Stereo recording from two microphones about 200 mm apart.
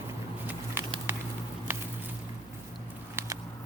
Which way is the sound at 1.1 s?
10° right (ahead or behind).